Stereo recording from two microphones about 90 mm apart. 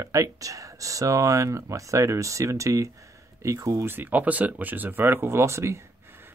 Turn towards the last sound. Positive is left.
turn(degrees=-30)  # may be behind; listen again after turning